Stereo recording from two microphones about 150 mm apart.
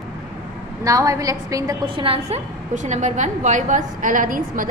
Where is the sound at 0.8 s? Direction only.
20° right (ahead or behind).